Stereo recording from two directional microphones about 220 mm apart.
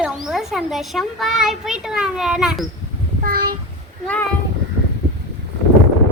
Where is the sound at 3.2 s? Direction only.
45° right (ahead or behind).